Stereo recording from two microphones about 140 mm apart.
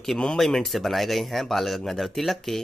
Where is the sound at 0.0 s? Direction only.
5° left (ahead or behind).